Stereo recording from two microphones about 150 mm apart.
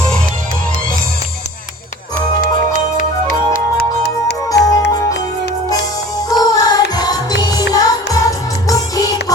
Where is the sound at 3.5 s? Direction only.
85° left.